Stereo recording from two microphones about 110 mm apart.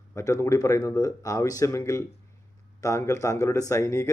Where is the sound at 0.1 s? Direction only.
25° left (ahead or behind).